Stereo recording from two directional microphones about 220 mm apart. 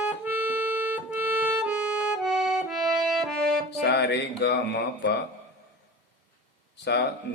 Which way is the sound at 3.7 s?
50° left (ahead or behind).